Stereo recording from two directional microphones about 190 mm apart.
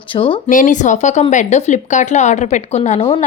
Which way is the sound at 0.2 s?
30° left (ahead or behind).